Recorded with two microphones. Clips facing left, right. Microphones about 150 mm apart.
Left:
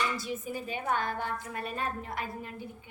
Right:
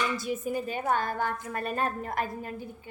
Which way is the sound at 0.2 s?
50° right (ahead or behind).